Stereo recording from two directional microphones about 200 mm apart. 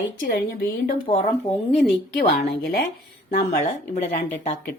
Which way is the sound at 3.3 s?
35° left (ahead or behind).